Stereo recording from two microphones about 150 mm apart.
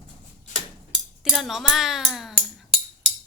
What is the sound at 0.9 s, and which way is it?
Speech, centre (ahead or behind).